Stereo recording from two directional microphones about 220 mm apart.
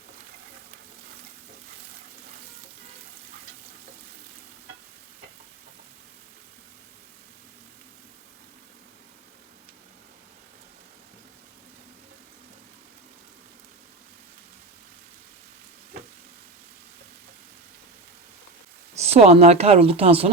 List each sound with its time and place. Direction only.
18.9 s a woman's voice: 30° right (ahead or behind)